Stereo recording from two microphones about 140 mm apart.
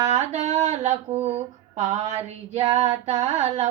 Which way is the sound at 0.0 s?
55° right (ahead or behind).